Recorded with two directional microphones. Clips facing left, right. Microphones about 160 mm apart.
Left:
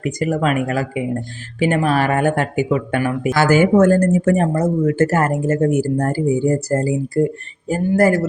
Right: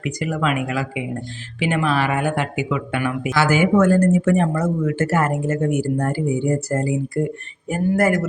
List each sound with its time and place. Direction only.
0.0 s speech: 45° left (ahead or behind)